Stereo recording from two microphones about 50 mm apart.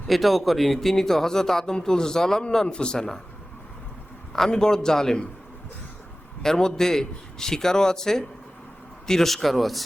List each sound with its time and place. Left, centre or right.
0.1 s speech: centre
4.3 s speech: centre
6.4 s speech: centre